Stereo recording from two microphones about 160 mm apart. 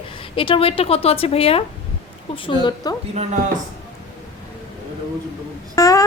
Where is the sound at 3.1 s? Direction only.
50° right (ahead or behind).